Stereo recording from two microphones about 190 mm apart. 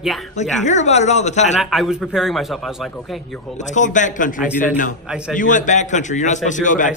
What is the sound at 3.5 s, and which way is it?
A man's voice, 40° left (ahead or behind).